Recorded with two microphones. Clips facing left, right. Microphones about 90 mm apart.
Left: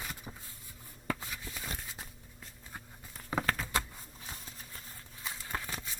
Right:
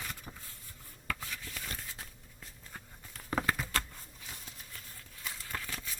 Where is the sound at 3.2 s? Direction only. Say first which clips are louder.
Even; centre (ahead or behind).